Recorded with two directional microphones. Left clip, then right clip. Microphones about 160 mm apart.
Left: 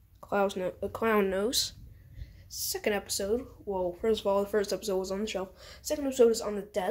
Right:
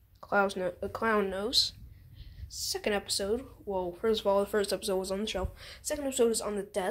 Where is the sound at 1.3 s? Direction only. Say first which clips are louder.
Right 1 dB; 40° left (ahead or behind).